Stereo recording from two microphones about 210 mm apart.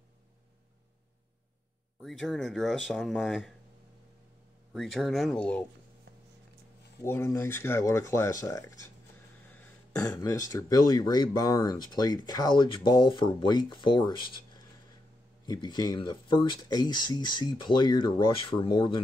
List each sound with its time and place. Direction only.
2.0 s speech: centre (ahead or behind)
4.7 s speech: centre (ahead or behind)
7.0 s speech: 15° left (ahead or behind)
15.4 s speech: 20° left (ahead or behind)